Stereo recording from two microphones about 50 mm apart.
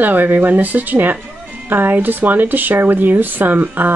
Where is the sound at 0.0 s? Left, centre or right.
Right.